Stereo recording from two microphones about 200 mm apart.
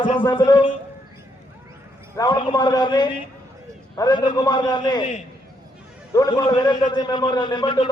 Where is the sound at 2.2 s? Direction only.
20° left (ahead or behind).